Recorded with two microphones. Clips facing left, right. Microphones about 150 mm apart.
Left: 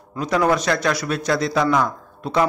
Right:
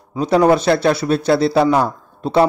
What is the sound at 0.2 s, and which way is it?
A man's voice, 30° right (ahead or behind).